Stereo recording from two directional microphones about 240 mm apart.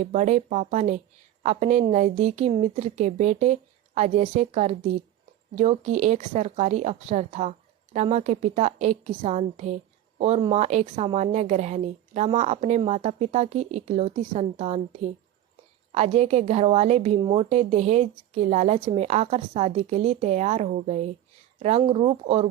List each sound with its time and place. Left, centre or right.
0.0 s a woman's voice: right
15.9 s a woman's voice: right